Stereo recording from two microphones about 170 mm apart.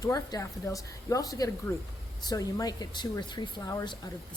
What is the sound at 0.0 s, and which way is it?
Speech, 20° left (ahead or behind).